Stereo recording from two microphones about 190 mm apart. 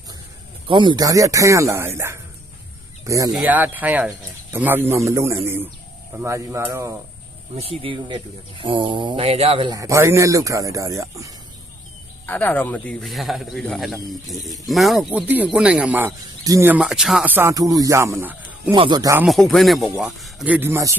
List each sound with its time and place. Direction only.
0.7 s speech: 25° right (ahead or behind)
3.1 s speech: 15° right (ahead or behind)
7.5 s speech: 30° right (ahead or behind)
12.2 s a man's voice: 10° left (ahead or behind); by 18.7 s 10° right (ahead or behind)
18.7 s speech: 25° right (ahead or behind)
19.2 s a man's voice: centre (ahead or behind)